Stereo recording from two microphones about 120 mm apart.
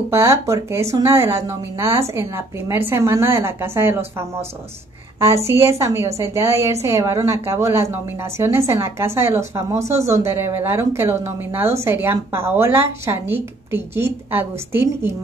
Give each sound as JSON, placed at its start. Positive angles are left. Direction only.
{"t": 0.1, "sound": "a woman's voice", "side_deg": -20}
{"t": 5.6, "sound": "a woman's voice", "side_deg": -25}